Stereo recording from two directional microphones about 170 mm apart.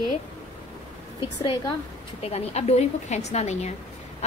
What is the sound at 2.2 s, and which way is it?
A woman's voice, 40° left (ahead or behind).